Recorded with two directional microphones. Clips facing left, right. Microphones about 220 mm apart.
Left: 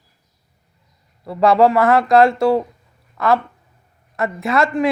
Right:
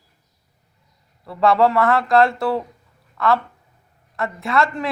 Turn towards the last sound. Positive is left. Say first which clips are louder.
# left 4 dB
turn(degrees=20)  # may be behind; listen again after turning